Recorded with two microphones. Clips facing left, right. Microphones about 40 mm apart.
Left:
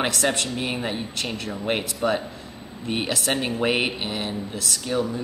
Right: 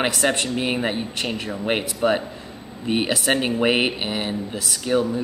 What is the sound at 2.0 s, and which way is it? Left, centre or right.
Speech, right.